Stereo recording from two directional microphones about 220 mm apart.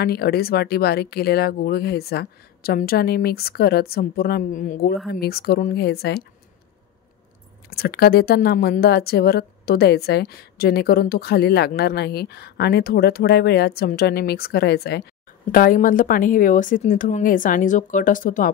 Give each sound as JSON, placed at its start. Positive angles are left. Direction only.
{"t": 0.0, "sound": "a woman's voice", "side_deg": 45}
{"t": 7.7, "sound": "a woman's voice", "side_deg": 45}